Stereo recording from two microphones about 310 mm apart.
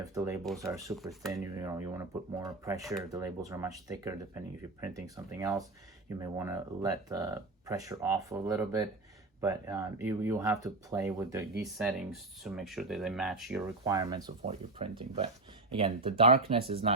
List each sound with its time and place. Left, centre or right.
0.0 s speech: centre